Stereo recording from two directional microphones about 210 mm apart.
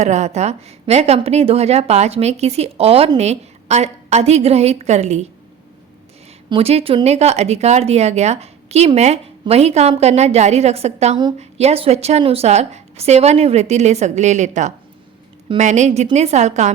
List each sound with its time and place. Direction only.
0.0 s a woman's voice: 35° right (ahead or behind)
6.5 s a woman's voice: 30° right (ahead or behind)